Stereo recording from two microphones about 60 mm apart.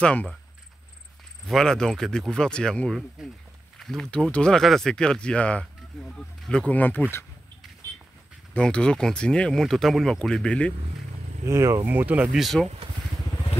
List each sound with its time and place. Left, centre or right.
0.0 s speech: left
1.5 s speech: centre
3.2 s speech: centre
3.8 s speech: centre
4.6 s speech: centre
6.7 s speech: left
8.5 s speech: centre
11.4 s speech: right
11.8 s speech: right
12.6 s speech: centre